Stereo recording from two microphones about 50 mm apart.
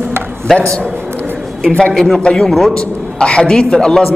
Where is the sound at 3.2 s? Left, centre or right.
Centre.